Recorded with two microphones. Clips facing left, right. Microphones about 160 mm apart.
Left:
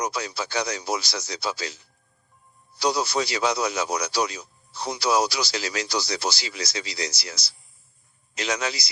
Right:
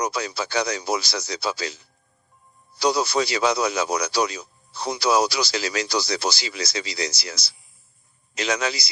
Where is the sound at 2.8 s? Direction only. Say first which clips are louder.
Right 3 dB; 90° right.